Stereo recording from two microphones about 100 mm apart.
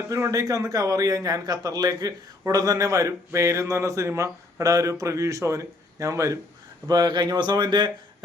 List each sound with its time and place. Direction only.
0.1 s a man's voice: 30° right (ahead or behind)
6.8 s speech: 45° right (ahead or behind)